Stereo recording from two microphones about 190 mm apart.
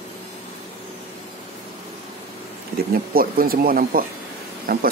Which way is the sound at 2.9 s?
50° right (ahead or behind).